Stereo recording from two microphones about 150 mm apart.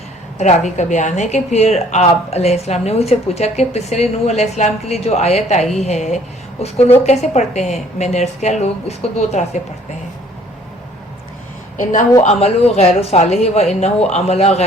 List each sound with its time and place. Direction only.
0.3 s a woman's voice: 50° left (ahead or behind)
11.8 s a woman's voice: 60° left (ahead or behind)
12.2 s a woman's voice: 45° left (ahead or behind)